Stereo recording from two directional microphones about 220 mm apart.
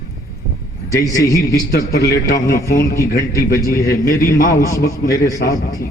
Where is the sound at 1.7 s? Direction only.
45° left (ahead or behind).